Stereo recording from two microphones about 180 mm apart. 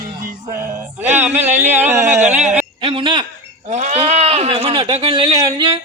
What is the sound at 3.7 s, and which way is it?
Speech, 40° right (ahead or behind).